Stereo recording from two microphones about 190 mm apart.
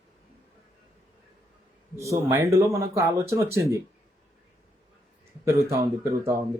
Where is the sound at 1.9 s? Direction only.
15° right (ahead or behind).